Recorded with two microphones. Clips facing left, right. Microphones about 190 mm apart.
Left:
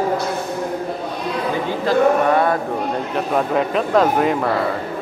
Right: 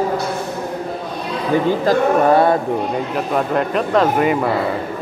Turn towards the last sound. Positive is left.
turn(degrees=0)  # may be behind; listen again after turning